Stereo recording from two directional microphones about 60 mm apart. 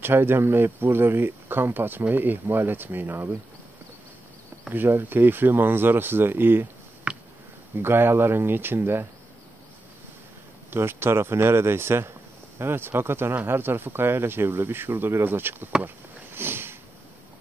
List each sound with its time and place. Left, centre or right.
0.0 s speech: right
4.6 s speech: right
7.1 s a sound: centre
7.8 s speech: right
10.7 s speech: right
16.3 s sniff: right